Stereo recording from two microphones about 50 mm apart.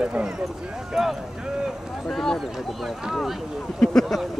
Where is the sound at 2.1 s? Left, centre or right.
Centre.